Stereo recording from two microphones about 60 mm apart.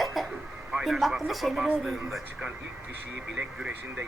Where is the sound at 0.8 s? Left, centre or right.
Centre.